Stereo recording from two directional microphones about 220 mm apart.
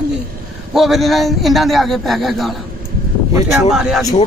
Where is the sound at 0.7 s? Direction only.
Centre (ahead or behind).